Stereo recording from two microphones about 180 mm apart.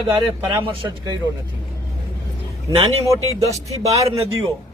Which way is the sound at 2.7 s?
35° right (ahead or behind).